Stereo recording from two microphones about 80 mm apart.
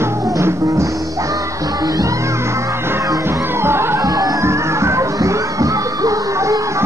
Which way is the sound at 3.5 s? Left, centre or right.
Right.